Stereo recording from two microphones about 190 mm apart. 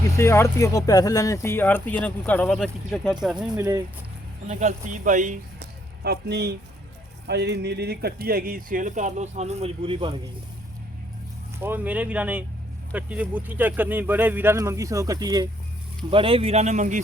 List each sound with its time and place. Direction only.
0.2 s speech: 15° left (ahead or behind)
4.4 s speech: 40° right (ahead or behind)
5.5 s a sound: 60° right (ahead or behind)
7.3 s speech: 60° right (ahead or behind); by 10.2 s 25° right (ahead or behind)
11.6 s speech: 10° right (ahead or behind); by 17.0 s 40° right (ahead or behind)